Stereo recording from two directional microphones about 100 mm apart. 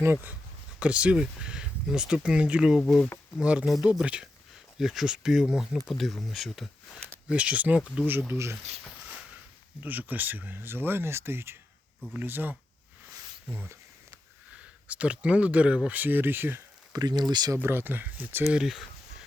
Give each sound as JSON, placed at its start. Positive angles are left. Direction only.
{"t": 0.0, "sound": "speech", "side_deg": -20}
{"t": 7.3, "sound": "speech", "side_deg": -15}
{"t": 8.3, "sound": "speech", "side_deg": -25}
{"t": 9.8, "sound": "speech", "side_deg": -15}
{"t": 16.9, "sound": "speech", "side_deg": -45}
{"t": 17.6, "sound": "speech", "side_deg": -20}
{"t": 18.5, "sound": "speech", "side_deg": -5}